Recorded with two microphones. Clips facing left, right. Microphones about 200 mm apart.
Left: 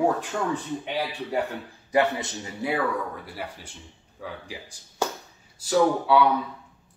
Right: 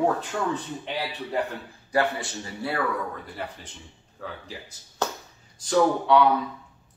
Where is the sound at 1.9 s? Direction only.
20° left (ahead or behind).